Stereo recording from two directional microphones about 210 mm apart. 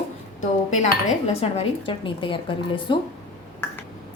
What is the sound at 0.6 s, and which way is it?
A woman's voice, 35° left (ahead or behind).